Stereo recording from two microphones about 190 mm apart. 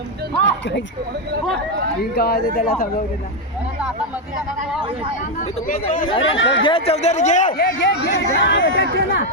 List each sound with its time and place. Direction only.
2.1 s speech: 55° left (ahead or behind)
6.2 s speech: 80° left
6.6 s speech: 30° left (ahead or behind)
7.8 s speech: 65° left (ahead or behind)